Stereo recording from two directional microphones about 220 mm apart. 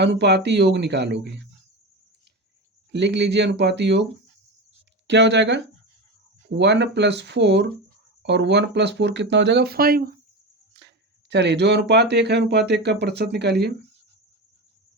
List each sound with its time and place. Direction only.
0.0 s speech: 50° right (ahead or behind)
2.9 s speech: 50° right (ahead or behind)
5.0 s speech: 50° right (ahead or behind)
11.3 s speech: 50° right (ahead or behind)